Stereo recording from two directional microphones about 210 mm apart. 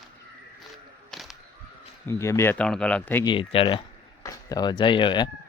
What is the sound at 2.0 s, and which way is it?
Speech, 15° left (ahead or behind).